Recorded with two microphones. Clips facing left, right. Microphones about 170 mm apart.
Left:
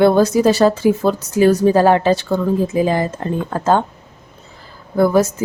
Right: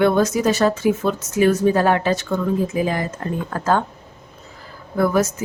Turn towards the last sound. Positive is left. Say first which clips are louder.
# left 4 dB
turn(degrees=30)  # may be behind; listen again after turning